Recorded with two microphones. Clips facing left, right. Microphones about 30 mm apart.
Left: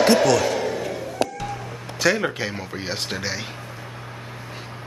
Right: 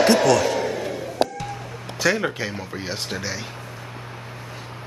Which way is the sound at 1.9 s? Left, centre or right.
Centre.